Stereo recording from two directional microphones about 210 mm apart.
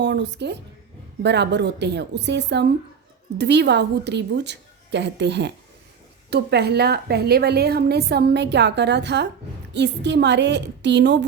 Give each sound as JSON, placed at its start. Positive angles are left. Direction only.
{"t": 0.0, "sound": "a woman's voice", "side_deg": -55}